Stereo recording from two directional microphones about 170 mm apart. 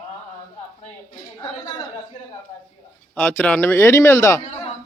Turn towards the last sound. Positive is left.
turn(degrees=40)  # may be behind; listen again after turning